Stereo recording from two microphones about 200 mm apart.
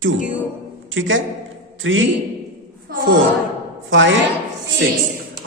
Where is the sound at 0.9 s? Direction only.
75° right (ahead or behind).